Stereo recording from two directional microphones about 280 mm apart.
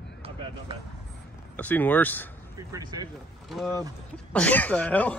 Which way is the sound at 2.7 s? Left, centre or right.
Centre.